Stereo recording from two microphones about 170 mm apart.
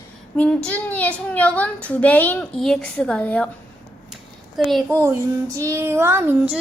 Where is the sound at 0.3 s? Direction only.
5° left (ahead or behind).